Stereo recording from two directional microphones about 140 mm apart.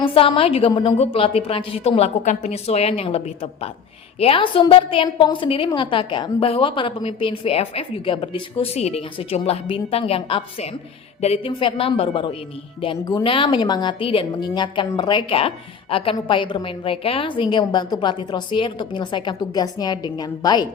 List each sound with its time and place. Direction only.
0.0 s a woman's voice: 40° left (ahead or behind)
0.9 s a woman's voice: 45° left (ahead or behind)
15.4 s a woman's voice: 40° left (ahead or behind)